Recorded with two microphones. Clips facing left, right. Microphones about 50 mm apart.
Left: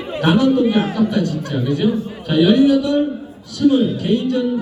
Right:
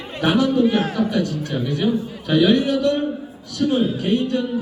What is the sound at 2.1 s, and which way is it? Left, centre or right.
Speech, centre.